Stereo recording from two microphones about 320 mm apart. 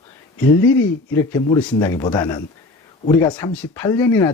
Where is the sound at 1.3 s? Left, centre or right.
Centre.